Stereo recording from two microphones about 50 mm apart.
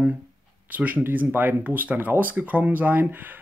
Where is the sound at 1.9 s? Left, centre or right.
Right.